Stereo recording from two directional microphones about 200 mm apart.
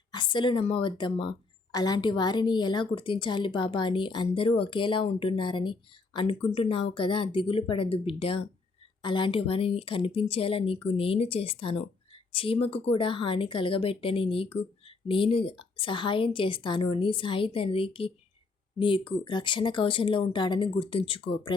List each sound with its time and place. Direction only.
0.1 s a woman's voice: 25° left (ahead or behind)